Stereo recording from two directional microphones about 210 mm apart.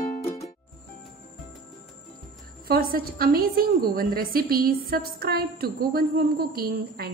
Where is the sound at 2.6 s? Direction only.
45° right (ahead or behind).